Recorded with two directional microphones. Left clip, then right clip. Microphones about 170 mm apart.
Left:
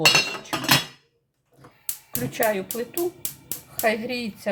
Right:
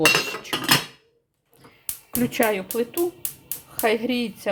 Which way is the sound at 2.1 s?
45° right (ahead or behind).